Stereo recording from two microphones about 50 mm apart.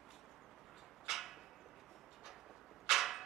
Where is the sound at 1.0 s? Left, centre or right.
Centre.